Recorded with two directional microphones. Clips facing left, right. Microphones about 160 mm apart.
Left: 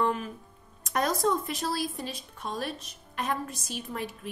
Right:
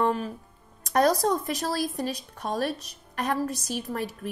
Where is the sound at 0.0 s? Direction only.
35° right (ahead or behind).